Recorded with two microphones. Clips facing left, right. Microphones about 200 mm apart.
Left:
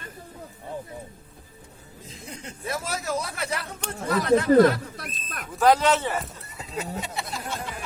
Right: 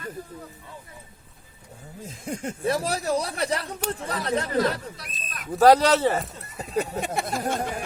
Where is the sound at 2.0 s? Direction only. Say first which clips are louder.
Right 9 dB; 50° right (ahead or behind).